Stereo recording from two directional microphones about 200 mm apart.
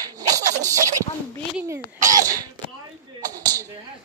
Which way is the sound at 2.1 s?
15° right (ahead or behind).